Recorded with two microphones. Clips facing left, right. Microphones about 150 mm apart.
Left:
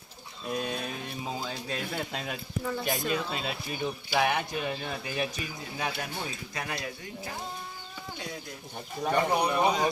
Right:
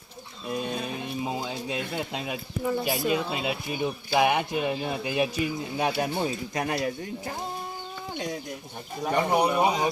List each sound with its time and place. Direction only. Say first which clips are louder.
0.4 s speech: right 2 dB; 5° right (ahead or behind)
1.2 s speech: right 3 dB; 15° right (ahead or behind)
5.7 s speech: right 6 dB; 30° right (ahead or behind)
9.0 s speech: right 3 dB; 15° right (ahead or behind)